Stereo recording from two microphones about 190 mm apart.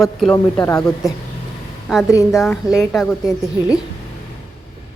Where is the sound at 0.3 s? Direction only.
15° left (ahead or behind).